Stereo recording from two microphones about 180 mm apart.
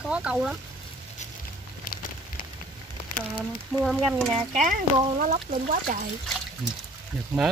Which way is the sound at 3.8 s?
Centre (ahead or behind).